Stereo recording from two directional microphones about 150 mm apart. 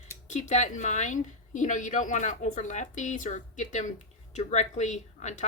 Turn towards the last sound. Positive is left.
turn(degrees=50)  # may be behind; listen again after turning